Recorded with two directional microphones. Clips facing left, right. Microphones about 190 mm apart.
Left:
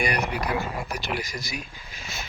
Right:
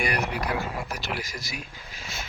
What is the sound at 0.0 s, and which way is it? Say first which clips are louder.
Speech: left 1 dB; 5° right (ahead or behind).